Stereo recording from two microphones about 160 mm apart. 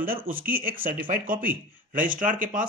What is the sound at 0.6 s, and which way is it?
Speech, 60° right (ahead or behind).